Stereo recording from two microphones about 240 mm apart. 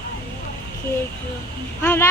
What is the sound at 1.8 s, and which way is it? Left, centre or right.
Speech, centre.